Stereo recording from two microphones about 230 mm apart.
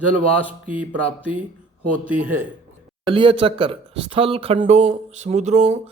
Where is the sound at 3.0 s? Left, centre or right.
Right.